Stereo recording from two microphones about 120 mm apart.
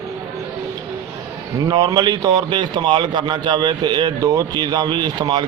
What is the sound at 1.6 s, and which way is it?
A man's voice, 30° right (ahead or behind).